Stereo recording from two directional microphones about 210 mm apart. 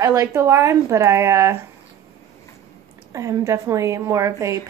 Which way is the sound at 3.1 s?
15° right (ahead or behind).